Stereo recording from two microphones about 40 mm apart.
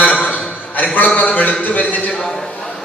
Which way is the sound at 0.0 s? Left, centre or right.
Left.